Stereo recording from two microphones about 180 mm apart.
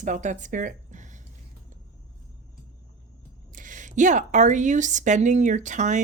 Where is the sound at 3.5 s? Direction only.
45° right (ahead or behind).